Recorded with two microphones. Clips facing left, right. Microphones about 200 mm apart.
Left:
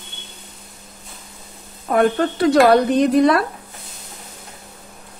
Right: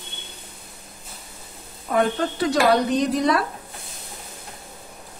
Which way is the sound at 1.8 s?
55° left (ahead or behind).